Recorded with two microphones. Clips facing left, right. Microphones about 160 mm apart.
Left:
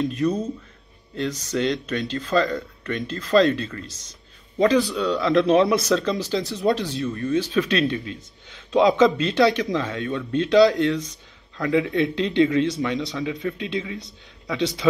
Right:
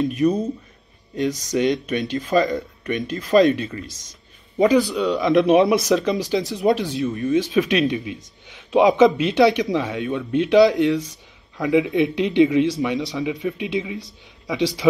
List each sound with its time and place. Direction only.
0.0 s speech: 15° right (ahead or behind)
1.5 s speech: 15° right (ahead or behind)